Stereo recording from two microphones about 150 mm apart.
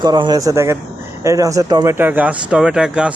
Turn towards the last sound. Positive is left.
turn(degrees=-5)  # may be behind; listen again after turning